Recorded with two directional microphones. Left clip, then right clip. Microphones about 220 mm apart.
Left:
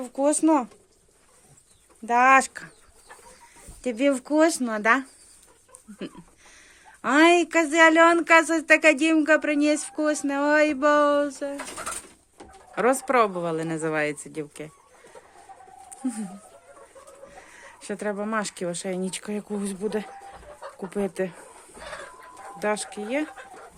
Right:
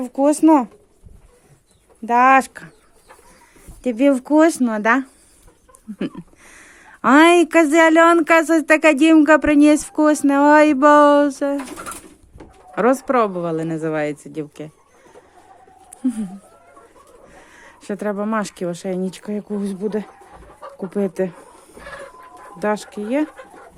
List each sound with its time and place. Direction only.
0.0 s speech: 15° right (ahead or behind)
2.0 s speech: 10° right (ahead or behind)
3.8 s speech: 10° right (ahead or behind)
6.0 s a woman's voice: 25° right (ahead or behind)
12.7 s speech: 10° right (ahead or behind)
17.2 s speech: 15° right (ahead or behind)
22.5 s speech: 15° right (ahead or behind)